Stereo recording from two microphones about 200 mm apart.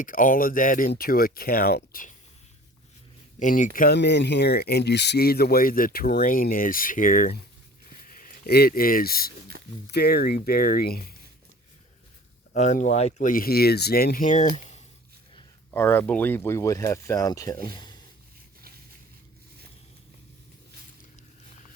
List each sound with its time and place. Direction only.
0.0 s speech: 45° left (ahead or behind)
3.3 s speech: 40° left (ahead or behind)
3.8 s speech: 50° left (ahead or behind)
12.5 s speech: 35° left (ahead or behind)
15.7 s speech: 10° left (ahead or behind)